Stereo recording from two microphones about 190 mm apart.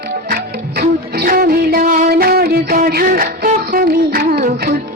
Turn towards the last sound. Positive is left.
turn(degrees=-55)  # may be behind; listen again after turning